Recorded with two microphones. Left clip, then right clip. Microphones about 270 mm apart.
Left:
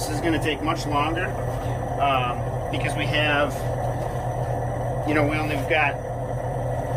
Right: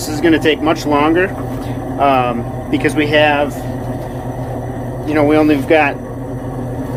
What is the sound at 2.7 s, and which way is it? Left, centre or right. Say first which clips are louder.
Speech: right 13 dB; centre.